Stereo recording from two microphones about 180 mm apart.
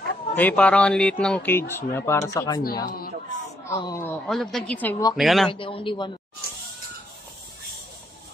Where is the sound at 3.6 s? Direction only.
15° left (ahead or behind).